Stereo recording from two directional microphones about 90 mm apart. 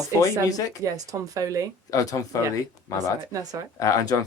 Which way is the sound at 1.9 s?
40° left (ahead or behind).